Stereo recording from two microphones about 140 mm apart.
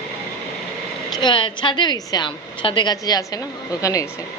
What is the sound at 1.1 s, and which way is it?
A woman's voice, 35° left (ahead or behind).